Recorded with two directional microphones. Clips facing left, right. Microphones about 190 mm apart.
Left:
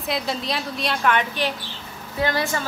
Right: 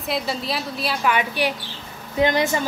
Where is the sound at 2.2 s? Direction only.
20° right (ahead or behind).